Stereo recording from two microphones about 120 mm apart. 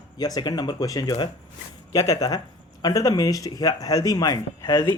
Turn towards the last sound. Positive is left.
turn(degrees=25)  # may be behind; listen again after turning